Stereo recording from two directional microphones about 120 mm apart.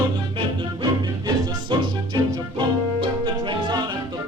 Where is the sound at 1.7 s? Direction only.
40° right (ahead or behind).